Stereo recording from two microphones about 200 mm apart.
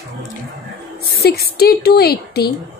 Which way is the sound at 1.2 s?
50° left (ahead or behind).